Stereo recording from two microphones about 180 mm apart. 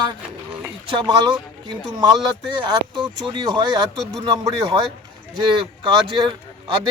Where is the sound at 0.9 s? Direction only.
25° right (ahead or behind).